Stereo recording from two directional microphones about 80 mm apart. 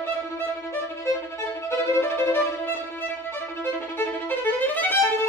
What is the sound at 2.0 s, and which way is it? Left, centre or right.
Violin, left.